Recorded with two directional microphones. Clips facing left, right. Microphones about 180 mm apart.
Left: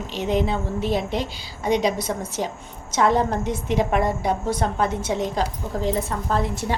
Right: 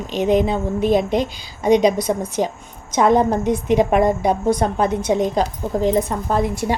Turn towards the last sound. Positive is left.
turn(degrees=-15)  # may be behind; listen again after turning